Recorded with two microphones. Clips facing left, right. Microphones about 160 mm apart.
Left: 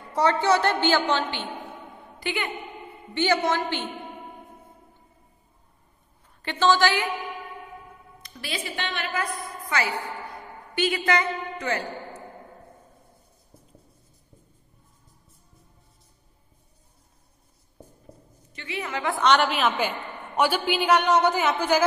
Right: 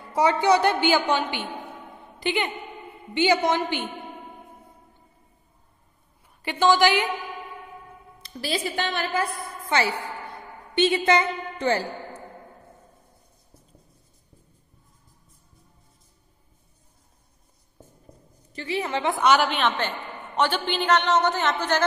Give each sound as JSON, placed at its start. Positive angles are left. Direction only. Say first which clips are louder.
{"t": 0.1, "sound": "a woman's voice", "louder": "right 2 dB", "side_deg": -10}
{"t": 2.1, "sound": "a woman's voice", "louder": "right 4 dB", "side_deg": -20}
{"t": 6.4, "sound": "a woman's voice", "louder": "right 2 dB", "side_deg": -10}
{"t": 8.2, "sound": "a woman's voice", "louder": "right 6 dB", "side_deg": -30}
{"t": 18.5, "sound": "a woman's voice", "louder": "right 5 dB", "side_deg": -35}
{"t": 19.1, "sound": "a woman's voice", "louder": "left 1 dB", "side_deg": -5}